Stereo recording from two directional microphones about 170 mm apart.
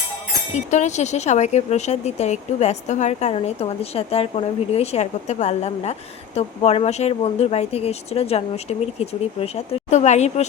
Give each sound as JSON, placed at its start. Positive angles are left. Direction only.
{"t": 0.5, "sound": "speech", "side_deg": 45}